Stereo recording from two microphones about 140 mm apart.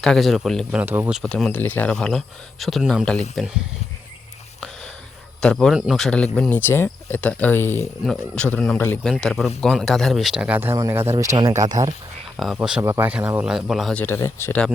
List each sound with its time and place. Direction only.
0.0 s speech: centre (ahead or behind)
0.8 s speech: 10° right (ahead or behind)
1.2 s speech: 5° left (ahead or behind)
5.4 s speech: 5° left (ahead or behind)
8.0 s speech: 5° left (ahead or behind); by 11.3 s 20° right (ahead or behind)
11.7 s speech: 30° right (ahead or behind)
12.5 s speech: 5° right (ahead or behind)
14.0 s speech: 15° left (ahead or behind)